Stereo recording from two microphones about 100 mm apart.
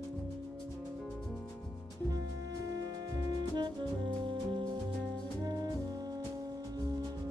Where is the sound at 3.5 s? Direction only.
50° right (ahead or behind).